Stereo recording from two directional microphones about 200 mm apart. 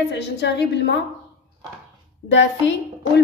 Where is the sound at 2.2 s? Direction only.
65° left (ahead or behind).